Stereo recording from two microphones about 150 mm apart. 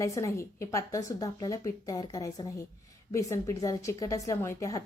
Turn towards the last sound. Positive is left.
turn(degrees=20)  # may be behind; listen again after turning